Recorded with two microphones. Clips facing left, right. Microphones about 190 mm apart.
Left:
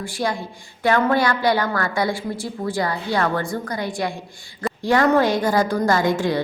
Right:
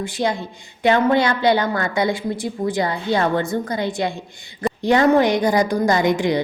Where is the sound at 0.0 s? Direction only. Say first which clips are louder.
Right 3 dB; 20° right (ahead or behind).